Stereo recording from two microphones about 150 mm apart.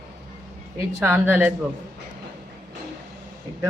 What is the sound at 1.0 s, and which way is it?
Speech, 15° right (ahead or behind).